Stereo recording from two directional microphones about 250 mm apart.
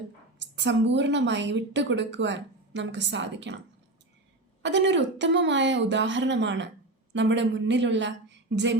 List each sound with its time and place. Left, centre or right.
0.3 s a woman's voice: right
4.6 s a woman's voice: right